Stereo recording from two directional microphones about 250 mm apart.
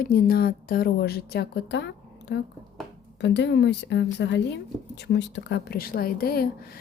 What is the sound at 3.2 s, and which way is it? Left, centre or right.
A woman's voice, left.